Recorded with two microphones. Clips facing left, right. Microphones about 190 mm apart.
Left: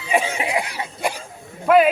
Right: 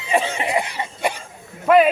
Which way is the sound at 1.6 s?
Centre (ahead or behind).